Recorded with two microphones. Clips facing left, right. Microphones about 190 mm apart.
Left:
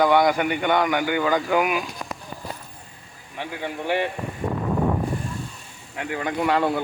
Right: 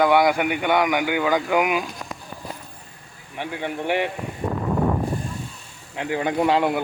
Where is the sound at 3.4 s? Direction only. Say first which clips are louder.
Right 2 dB; 15° right (ahead or behind).